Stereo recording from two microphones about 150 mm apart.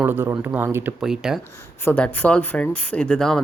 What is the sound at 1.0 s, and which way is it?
Speech, 5° right (ahead or behind).